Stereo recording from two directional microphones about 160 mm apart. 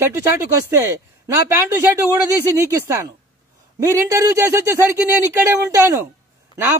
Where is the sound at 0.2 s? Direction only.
15° right (ahead or behind).